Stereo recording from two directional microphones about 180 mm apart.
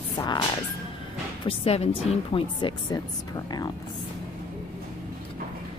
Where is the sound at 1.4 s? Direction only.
30° left (ahead or behind).